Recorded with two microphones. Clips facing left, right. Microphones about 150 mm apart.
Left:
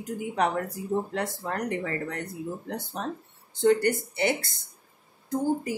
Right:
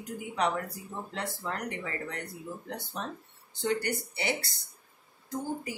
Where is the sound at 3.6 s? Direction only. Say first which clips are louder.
Left 9 dB; 50° left (ahead or behind).